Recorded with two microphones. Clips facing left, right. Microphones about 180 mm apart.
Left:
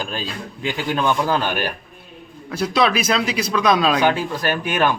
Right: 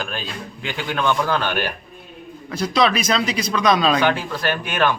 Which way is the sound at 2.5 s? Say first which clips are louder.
Even; centre (ahead or behind).